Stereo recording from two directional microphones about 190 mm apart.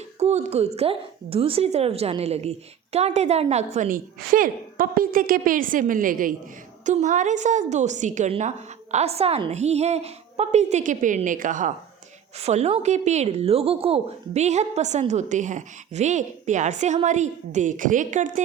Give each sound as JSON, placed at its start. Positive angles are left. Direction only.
{"t": 0.2, "sound": "a woman's voice", "side_deg": -35}